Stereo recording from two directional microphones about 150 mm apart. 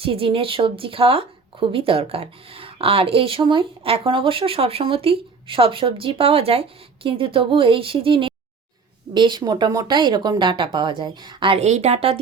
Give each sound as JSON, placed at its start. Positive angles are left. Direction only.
{"t": 0.0, "sound": "speech", "side_deg": -40}